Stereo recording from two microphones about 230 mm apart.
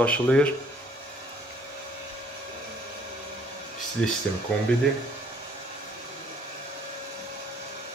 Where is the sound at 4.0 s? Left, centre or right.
Centre.